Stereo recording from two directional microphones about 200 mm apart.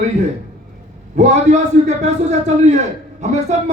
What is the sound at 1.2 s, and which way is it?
A man's voice, 35° right (ahead or behind).